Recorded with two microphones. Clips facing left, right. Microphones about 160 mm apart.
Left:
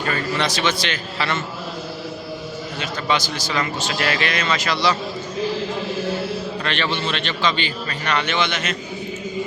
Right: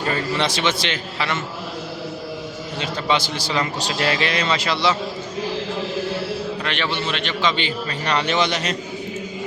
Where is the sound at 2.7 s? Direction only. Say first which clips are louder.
Right 1 dB; 30° right (ahead or behind).